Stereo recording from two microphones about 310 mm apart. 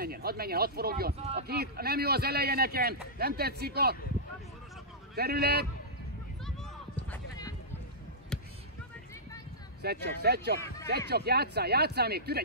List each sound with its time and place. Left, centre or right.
0.0 s speech: right
1.5 s speech: right
5.1 s speech: right
7.1 s clip-clop: centre
9.8 s speech: right